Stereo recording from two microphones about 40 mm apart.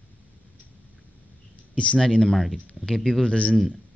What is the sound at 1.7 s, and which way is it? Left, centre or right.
Speech, left.